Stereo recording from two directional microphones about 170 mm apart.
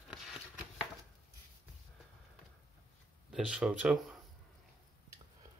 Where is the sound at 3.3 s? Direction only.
5° right (ahead or behind).